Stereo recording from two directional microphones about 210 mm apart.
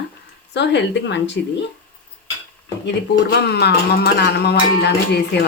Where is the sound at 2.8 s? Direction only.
55° left (ahead or behind).